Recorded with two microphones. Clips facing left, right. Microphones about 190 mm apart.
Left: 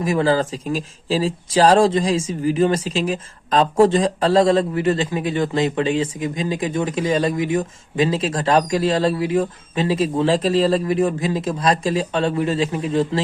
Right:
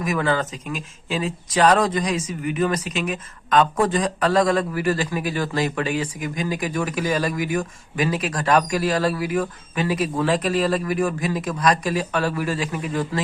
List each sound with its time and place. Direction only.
0.0 s speech: 30° left (ahead or behind)